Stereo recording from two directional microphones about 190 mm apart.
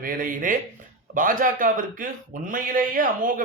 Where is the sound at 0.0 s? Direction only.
45° right (ahead or behind).